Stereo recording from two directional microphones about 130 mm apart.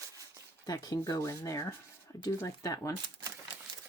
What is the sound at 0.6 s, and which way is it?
Speech, 30° left (ahead or behind).